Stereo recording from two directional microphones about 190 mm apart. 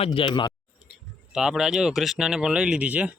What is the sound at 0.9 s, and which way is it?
Speech, 5° right (ahead or behind).